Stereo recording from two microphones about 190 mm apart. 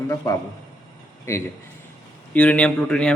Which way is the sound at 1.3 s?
15° left (ahead or behind).